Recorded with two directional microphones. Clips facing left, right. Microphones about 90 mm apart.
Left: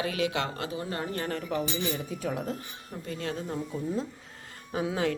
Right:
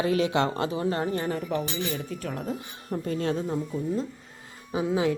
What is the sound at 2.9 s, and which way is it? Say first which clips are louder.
Speech: right 8 dB; 40° right (ahead or behind).